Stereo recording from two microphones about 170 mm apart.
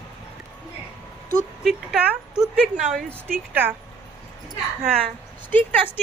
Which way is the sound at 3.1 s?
10° right (ahead or behind).